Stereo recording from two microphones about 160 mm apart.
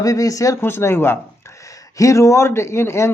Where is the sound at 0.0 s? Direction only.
20° left (ahead or behind).